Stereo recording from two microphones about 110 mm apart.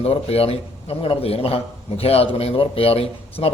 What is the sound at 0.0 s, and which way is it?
Speech, 65° left (ahead or behind).